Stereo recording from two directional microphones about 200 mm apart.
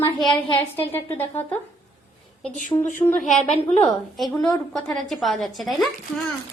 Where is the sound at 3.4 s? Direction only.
35° left (ahead or behind).